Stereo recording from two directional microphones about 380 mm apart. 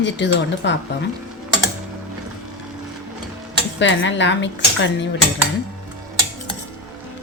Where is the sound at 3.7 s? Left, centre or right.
Left.